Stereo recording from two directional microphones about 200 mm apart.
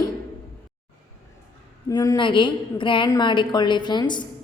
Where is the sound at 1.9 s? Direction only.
20° left (ahead or behind).